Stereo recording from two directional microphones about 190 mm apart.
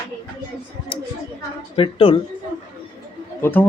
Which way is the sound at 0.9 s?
25° left (ahead or behind).